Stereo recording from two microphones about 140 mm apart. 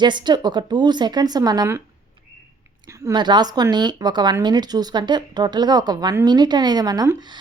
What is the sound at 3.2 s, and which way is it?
A woman's voice, 30° right (ahead or behind).